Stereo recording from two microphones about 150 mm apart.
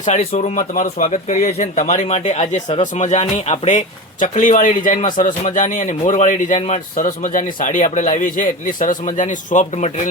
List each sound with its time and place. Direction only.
0.1 s speech: 45° left (ahead or behind)
3.8 s a man's voice: 60° left (ahead or behind)
6.9 s a man's voice: 65° left (ahead or behind)